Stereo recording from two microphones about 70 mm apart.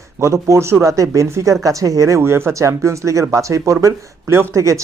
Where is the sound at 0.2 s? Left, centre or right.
Right.